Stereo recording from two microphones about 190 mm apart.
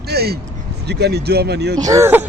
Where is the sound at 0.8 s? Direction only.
60° right (ahead or behind).